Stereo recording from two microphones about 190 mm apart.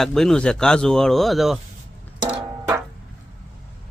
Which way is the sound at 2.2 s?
20° right (ahead or behind).